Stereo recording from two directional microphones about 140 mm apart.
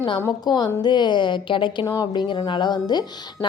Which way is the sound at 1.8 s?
25° left (ahead or behind).